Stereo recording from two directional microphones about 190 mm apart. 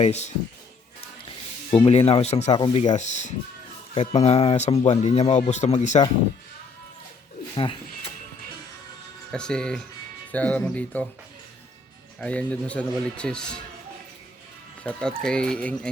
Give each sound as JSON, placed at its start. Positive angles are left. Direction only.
{"t": 0.0, "sound": "speech", "side_deg": 35}
{"t": 1.8, "sound": "speech", "side_deg": 30}
{"t": 7.5, "sound": "a sound", "side_deg": 25}
{"t": 9.3, "sound": "a man's voice", "side_deg": 5}
{"t": 12.2, "sound": "a man's voice", "side_deg": 5}
{"t": 14.8, "sound": "a man's voice", "side_deg": 5}